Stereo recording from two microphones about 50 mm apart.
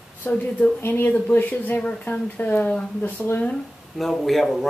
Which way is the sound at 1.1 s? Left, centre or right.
Left.